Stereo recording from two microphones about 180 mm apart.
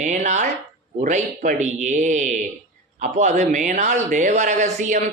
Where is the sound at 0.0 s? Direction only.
40° right (ahead or behind).